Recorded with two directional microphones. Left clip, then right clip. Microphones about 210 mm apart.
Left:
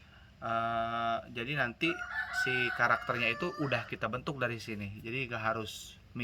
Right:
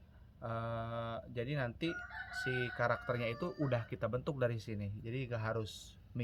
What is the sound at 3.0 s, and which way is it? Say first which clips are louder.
Speech: left 6 dB; 55° right (ahead or behind).